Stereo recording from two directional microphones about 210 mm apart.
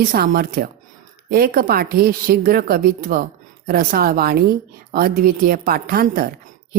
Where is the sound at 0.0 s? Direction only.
40° right (ahead or behind).